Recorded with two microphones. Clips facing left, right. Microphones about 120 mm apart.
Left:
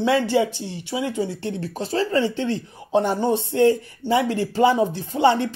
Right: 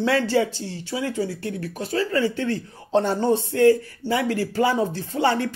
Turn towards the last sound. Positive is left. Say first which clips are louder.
# left 3 dB
turn(degrees=20)  # may be behind; listen again after turning